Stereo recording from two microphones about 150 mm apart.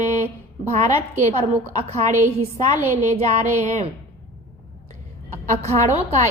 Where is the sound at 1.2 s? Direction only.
45° right (ahead or behind).